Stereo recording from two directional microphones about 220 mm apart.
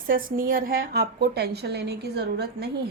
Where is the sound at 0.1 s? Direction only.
40° right (ahead or behind).